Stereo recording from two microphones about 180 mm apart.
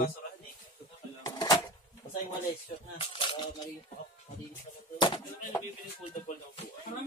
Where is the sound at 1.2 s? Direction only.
20° left (ahead or behind).